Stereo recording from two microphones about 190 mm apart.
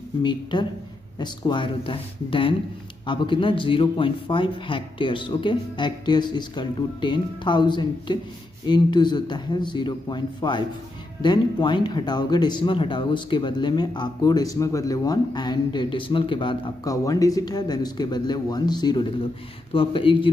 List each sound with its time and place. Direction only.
0.2 s speech: 25° left (ahead or behind)